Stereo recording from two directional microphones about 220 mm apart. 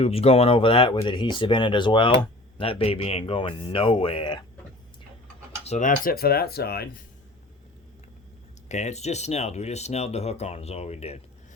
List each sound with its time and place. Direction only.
0.0 s speech: 25° left (ahead or behind)
5.6 s speech: 35° left (ahead or behind)
8.7 s speech: 30° left (ahead or behind)